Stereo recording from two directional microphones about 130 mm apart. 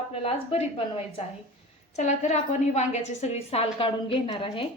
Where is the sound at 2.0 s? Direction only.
65° left (ahead or behind); by 4.6 s 45° left (ahead or behind).